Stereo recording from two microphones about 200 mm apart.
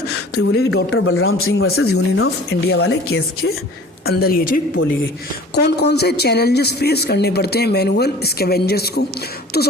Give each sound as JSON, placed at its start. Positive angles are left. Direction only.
{"t": 0.5, "sound": "a man's voice", "side_deg": 75}
{"t": 2.6, "sound": "speech", "side_deg": 70}
{"t": 4.1, "sound": "speech", "side_deg": 50}
{"t": 5.5, "sound": "speech", "side_deg": 55}